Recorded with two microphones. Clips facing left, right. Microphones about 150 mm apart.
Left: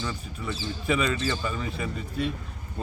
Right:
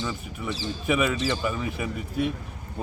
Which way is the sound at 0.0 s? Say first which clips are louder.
Right 2 dB; 10° right (ahead or behind).